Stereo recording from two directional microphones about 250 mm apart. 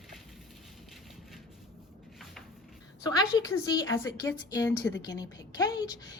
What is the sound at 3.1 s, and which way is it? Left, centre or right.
A woman's voice, centre.